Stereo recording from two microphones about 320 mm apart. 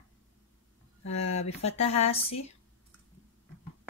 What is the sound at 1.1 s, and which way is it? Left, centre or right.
Speech, centre.